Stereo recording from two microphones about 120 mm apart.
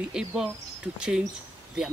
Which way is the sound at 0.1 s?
5° right (ahead or behind).